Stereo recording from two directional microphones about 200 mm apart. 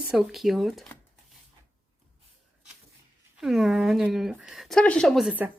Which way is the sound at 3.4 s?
Centre (ahead or behind).